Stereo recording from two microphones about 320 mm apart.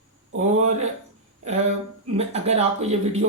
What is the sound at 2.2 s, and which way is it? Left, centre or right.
Speech, centre.